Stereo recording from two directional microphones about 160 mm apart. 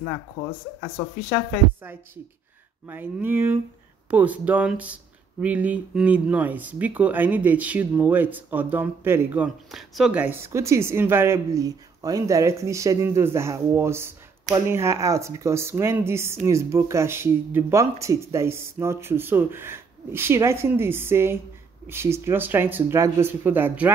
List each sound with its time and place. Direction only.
2.9 s speech: 10° right (ahead or behind)
9.7 s speech: centre (ahead or behind)